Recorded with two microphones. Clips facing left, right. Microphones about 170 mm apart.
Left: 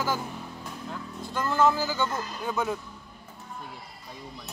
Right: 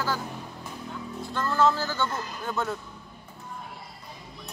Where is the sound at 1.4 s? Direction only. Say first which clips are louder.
Even; 15° left (ahead or behind).